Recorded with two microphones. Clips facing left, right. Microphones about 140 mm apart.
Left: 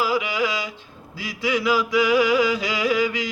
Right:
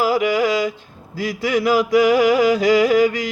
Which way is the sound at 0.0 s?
45° right (ahead or behind).